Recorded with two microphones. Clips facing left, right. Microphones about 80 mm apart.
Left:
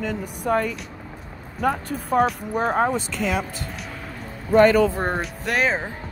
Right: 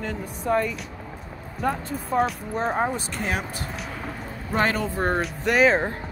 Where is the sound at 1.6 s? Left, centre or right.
Left.